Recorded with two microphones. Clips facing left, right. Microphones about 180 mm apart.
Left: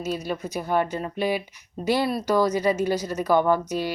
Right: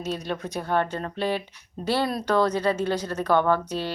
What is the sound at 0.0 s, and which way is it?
Speech, 10° left (ahead or behind).